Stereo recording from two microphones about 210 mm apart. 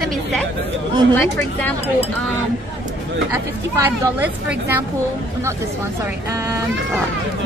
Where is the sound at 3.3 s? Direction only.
10° right (ahead or behind).